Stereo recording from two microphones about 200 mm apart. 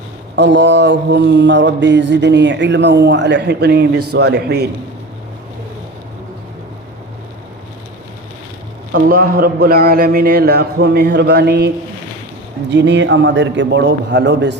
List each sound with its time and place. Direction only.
0.3 s mantra: 65° right (ahead or behind)
8.9 s a man's voice: 45° right (ahead or behind)
12.7 s mantra: 60° right (ahead or behind)